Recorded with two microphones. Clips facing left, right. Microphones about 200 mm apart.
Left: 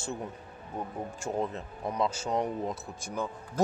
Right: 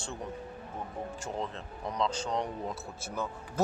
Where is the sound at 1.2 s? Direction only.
10° left (ahead or behind).